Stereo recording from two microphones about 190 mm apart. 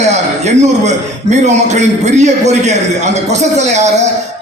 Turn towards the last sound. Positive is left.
turn(degrees=-35)  # may be behind; listen again after turning